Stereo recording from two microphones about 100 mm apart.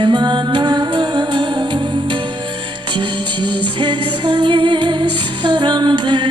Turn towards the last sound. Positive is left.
turn(degrees=-50)  # may be behind; listen again after turning